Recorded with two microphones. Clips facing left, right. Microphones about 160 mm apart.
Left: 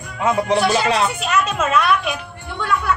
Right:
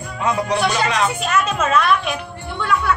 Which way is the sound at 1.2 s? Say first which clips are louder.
Even; centre (ahead or behind).